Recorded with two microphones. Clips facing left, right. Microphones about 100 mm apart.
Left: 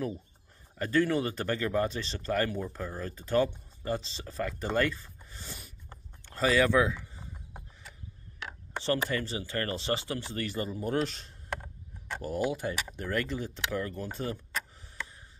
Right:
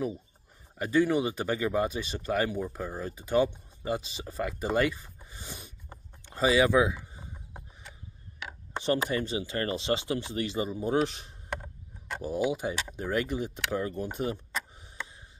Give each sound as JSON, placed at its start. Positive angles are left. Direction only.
{"t": 0.7, "sound": "speech", "side_deg": -10}
{"t": 8.5, "sound": "speech", "side_deg": -15}
{"t": 11.5, "sound": "a sound", "side_deg": 0}
{"t": 12.2, "sound": "speech", "side_deg": -15}